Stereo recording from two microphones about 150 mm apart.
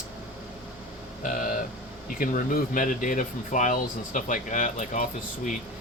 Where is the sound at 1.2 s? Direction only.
65° left (ahead or behind).